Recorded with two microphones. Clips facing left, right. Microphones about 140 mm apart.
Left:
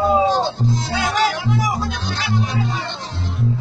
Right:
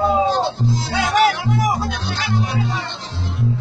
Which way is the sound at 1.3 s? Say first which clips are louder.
Right 2 dB; 55° right (ahead or behind).